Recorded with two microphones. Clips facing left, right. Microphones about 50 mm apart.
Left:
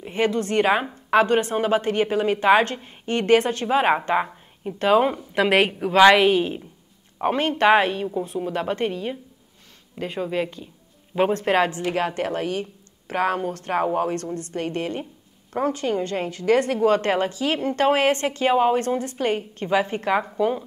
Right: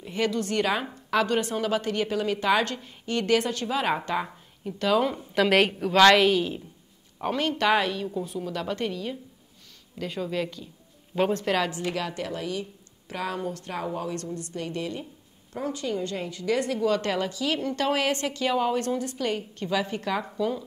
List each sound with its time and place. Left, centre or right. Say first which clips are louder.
0.0 s a woman's voice: left 4 dB; left